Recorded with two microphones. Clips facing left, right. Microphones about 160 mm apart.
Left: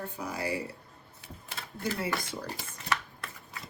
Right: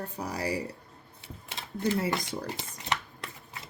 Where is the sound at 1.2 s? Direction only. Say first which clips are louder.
Right 1 dB; 20° right (ahead or behind).